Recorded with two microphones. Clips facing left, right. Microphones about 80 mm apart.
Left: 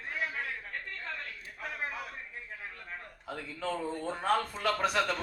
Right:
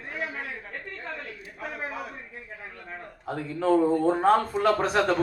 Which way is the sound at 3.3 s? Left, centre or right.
Right.